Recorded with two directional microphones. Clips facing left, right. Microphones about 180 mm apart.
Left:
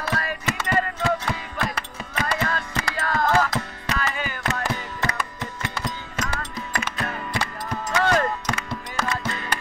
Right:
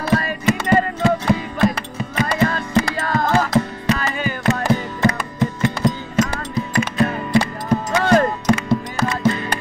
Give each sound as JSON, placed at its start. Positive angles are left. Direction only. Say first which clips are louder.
{"t": 0.0, "sound": "music", "louder": "right 9 dB", "side_deg": -25}
{"t": 7.7, "sound": "music", "louder": "right 7 dB", "side_deg": -40}
{"t": 8.5, "sound": "music", "louder": "right 9 dB", "side_deg": -20}